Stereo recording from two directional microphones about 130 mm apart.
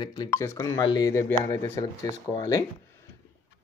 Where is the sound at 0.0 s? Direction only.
30° left (ahead or behind).